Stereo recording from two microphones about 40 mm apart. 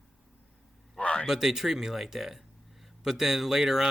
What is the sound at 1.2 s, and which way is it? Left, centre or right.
Speech, centre.